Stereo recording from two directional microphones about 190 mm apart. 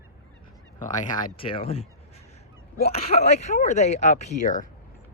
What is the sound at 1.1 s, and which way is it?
Speech, 25° left (ahead or behind).